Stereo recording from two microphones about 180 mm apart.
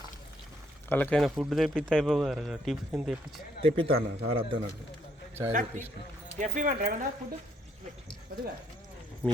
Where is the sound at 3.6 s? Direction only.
30° right (ahead or behind).